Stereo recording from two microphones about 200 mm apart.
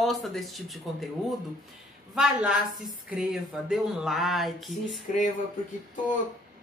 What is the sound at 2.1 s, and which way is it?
Speech, 5° right (ahead or behind).